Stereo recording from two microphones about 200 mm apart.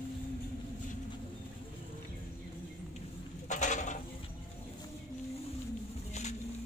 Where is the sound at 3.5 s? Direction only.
35° left (ahead or behind).